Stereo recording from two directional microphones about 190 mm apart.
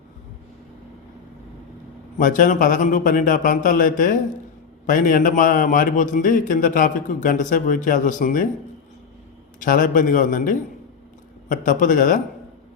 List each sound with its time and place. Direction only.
2.1 s a man's voice: 45° left (ahead or behind)
9.6 s a man's voice: 45° left (ahead or behind)